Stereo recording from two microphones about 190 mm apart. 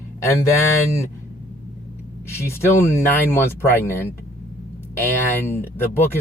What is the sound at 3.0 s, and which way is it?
Speech, 10° left (ahead or behind).